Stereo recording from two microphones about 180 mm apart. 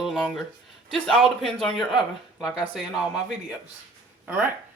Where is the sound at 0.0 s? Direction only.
Centre (ahead or behind).